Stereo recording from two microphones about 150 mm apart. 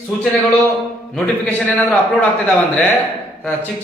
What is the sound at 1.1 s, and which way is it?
A man's voice, 5° left (ahead or behind).